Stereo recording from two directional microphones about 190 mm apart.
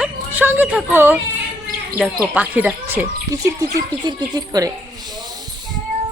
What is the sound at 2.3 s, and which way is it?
Speech, 5° right (ahead or behind).